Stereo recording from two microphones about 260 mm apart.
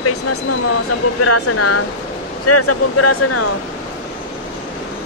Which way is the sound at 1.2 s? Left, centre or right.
Left.